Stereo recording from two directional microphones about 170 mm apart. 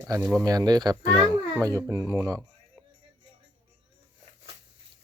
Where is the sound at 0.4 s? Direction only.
25° right (ahead or behind).